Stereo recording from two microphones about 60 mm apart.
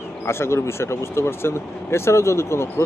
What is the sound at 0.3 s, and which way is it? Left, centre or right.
Speech, left.